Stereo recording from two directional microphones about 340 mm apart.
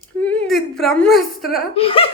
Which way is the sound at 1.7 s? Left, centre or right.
Centre.